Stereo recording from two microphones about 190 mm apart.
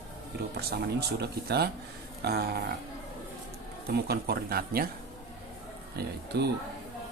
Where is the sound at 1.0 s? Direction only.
60° right (ahead or behind).